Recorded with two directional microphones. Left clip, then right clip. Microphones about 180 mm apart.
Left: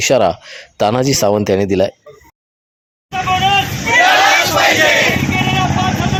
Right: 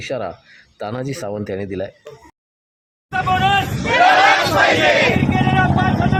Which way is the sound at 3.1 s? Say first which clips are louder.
Left 3 dB; centre (ahead or behind).